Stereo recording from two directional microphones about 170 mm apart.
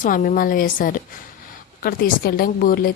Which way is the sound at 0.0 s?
55° left (ahead or behind).